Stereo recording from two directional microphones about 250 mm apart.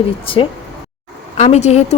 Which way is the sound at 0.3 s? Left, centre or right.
Left.